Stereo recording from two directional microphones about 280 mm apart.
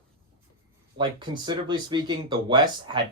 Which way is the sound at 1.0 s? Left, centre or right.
Centre.